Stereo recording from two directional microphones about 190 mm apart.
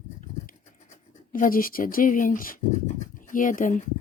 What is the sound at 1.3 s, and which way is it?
Speech, 45° left (ahead or behind).